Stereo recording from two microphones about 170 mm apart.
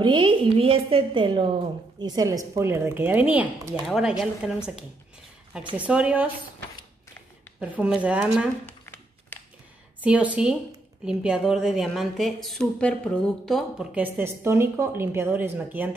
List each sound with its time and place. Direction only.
0.0 s a woman's voice: 30° right (ahead or behind); by 6.2 s 5° right (ahead or behind)
7.7 s speech: 5° right (ahead or behind)
8.6 s a sound: 10° left (ahead or behind)
10.0 s a woman's voice: 5° right (ahead or behind)